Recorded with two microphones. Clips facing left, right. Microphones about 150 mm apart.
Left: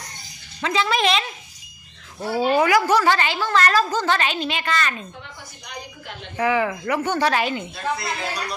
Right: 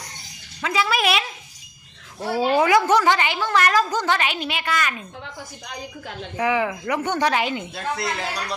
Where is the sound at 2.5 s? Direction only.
20° right (ahead or behind).